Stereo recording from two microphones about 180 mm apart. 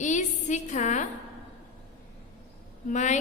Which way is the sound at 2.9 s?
40° left (ahead or behind).